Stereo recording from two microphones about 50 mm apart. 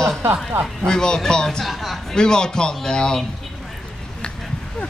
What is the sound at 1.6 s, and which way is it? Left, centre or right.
Speech, centre.